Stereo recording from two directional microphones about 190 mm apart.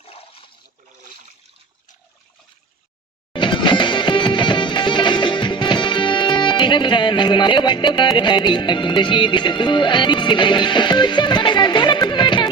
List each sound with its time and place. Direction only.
0.0 s water: 30° left (ahead or behind)
3.3 s music: 25° left (ahead or behind)